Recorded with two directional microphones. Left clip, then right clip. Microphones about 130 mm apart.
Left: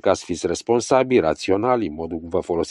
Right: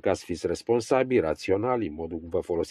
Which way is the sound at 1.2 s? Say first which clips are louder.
Left 6 dB; 60° left (ahead or behind).